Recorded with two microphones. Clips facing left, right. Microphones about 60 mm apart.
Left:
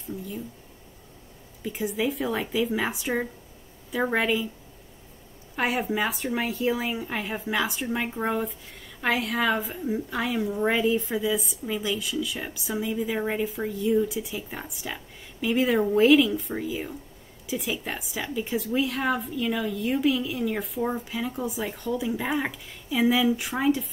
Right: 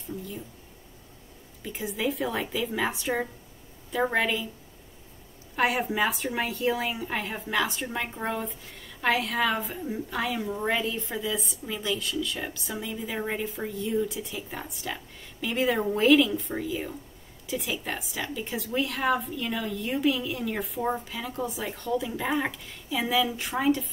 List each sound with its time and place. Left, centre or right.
1.6 s a woman's voice: centre
5.6 s a woman's voice: centre